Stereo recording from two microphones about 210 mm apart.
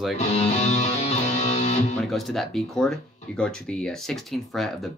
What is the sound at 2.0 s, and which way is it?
Speech, centre (ahead or behind).